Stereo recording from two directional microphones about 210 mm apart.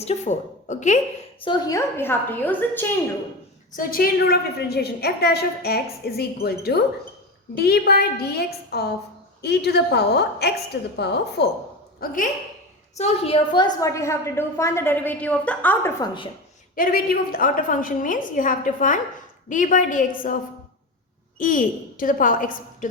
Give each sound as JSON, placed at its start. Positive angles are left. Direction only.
{"t": 0.0, "sound": "a woman's voice", "side_deg": 35}
{"t": 1.4, "sound": "a woman's voice", "side_deg": 20}
{"t": 3.8, "sound": "a woman's voice", "side_deg": 45}
{"t": 11.9, "sound": "speech", "side_deg": 40}
{"t": 13.0, "sound": "a woman's voice", "side_deg": 25}
{"t": 16.7, "sound": "a woman's voice", "side_deg": 45}